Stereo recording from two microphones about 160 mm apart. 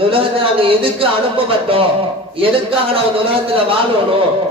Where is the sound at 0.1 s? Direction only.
35° right (ahead or behind).